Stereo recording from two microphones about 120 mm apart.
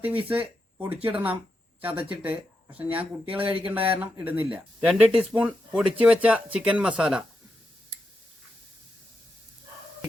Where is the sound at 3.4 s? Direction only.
50° right (ahead or behind).